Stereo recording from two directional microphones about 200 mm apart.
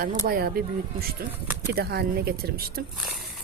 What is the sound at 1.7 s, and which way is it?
Speech, 50° right (ahead or behind).